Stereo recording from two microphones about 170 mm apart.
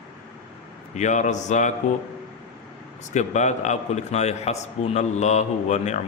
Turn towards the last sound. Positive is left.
turn(degrees=45)  # may be behind; listen again after turning